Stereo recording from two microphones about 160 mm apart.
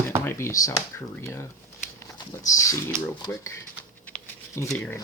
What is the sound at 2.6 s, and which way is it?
Speech, 20° left (ahead or behind).